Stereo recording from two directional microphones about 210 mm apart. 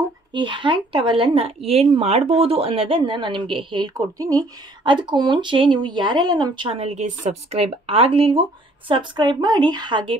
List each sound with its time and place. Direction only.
0.3 s speech: 25° right (ahead or behind)